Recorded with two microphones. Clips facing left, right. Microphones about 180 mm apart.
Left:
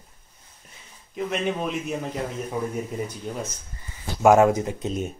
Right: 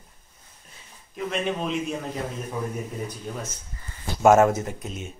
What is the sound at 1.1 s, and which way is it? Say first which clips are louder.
Speech: left 1 dB; 10° left (ahead or behind).